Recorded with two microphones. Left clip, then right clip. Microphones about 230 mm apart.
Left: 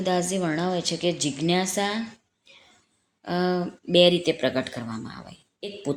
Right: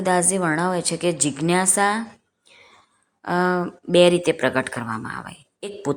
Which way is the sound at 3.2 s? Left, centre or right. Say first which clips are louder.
Right 5 dB; centre.